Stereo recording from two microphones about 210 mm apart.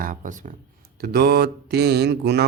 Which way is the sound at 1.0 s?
50° right (ahead or behind).